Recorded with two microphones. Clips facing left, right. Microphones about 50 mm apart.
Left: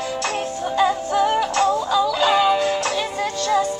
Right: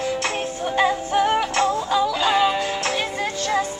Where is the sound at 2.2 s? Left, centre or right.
Centre.